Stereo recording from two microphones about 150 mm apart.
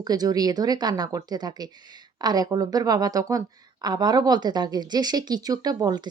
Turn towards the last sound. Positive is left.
turn(degrees=-25)  # may be behind; listen again after turning